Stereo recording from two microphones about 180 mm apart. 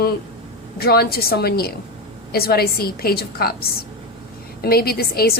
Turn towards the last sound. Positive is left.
turn(degrees=60)  # may be behind; listen again after turning